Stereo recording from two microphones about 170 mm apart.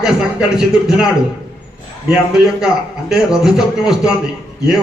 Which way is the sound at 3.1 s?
5° right (ahead or behind).